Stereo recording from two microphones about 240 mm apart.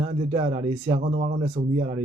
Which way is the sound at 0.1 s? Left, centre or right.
Right.